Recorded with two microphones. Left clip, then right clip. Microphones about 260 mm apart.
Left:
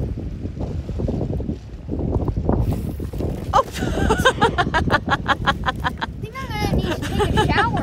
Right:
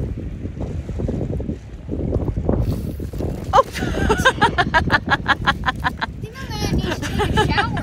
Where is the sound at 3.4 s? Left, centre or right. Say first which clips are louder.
Right 3 dB; centre.